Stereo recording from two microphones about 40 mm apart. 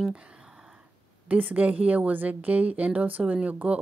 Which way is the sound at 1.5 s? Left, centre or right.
Right.